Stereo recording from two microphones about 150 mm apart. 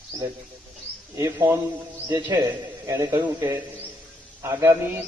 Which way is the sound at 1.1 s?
20° right (ahead or behind).